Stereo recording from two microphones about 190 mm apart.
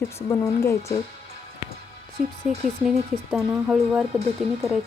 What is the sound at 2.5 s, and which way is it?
Speech, 35° right (ahead or behind).